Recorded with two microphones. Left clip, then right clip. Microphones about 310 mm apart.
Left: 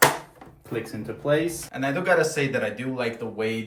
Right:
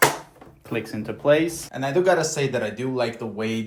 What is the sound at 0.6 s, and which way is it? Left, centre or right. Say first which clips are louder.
Speech: right 3 dB; centre.